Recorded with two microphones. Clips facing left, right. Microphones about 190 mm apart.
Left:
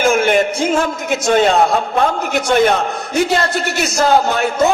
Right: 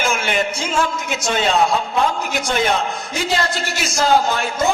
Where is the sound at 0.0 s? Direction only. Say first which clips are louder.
Left 7 dB; 50° left (ahead or behind).